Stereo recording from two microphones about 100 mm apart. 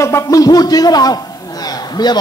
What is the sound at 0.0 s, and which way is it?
A man's voice, 30° left (ahead or behind).